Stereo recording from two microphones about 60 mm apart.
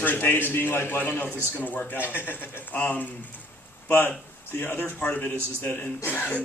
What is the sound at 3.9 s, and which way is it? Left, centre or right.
A man's voice, left.